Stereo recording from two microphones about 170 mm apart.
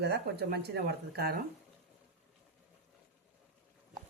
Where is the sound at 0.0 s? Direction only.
75° right (ahead or behind).